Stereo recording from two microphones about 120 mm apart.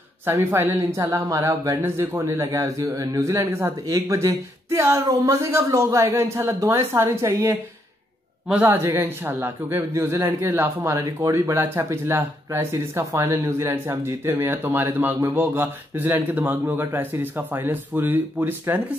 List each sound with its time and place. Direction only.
0.3 s speech: 20° right (ahead or behind)
8.6 s speech: 20° right (ahead or behind)